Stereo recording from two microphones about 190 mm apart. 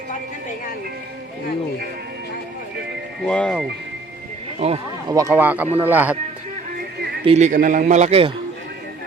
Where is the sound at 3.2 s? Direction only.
5° left (ahead or behind).